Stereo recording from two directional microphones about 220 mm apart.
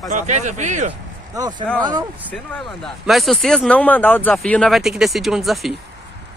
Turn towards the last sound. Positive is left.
turn(degrees=0)  # may be behind; listen again after turning